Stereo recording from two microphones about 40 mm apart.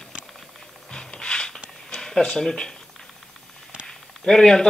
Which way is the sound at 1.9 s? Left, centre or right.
Centre.